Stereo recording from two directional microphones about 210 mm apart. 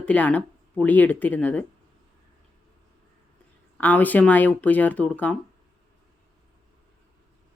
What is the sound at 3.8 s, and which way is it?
Speech, 10° left (ahead or behind).